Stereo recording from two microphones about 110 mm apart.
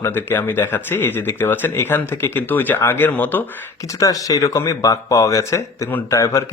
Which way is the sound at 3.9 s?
30° left (ahead or behind).